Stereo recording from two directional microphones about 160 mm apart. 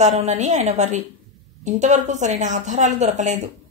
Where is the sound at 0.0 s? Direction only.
45° right (ahead or behind).